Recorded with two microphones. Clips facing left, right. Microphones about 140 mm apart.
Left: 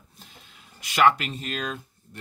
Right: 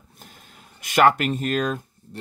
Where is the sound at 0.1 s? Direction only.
50° right (ahead or behind).